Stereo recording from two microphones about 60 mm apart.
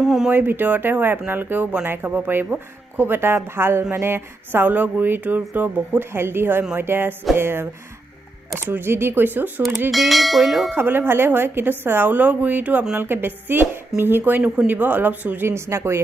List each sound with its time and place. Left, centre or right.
0.0 s speech: centre
0.3 s a woman's voice: right
9.8 s bell: centre
10.7 s speech: right
15.4 s a woman's voice: right